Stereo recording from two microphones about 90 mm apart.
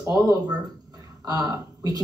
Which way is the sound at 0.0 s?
40° right (ahead or behind).